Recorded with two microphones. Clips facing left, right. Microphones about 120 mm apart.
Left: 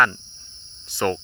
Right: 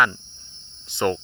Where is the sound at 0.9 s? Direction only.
20° right (ahead or behind).